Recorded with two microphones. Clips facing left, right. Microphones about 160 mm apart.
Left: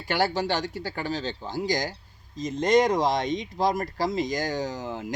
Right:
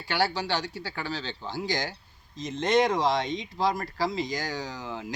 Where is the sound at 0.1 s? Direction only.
45° left (ahead or behind).